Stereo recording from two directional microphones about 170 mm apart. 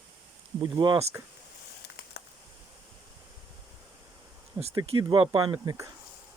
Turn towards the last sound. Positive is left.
turn(degrees=-20)  # may be behind; listen again after turning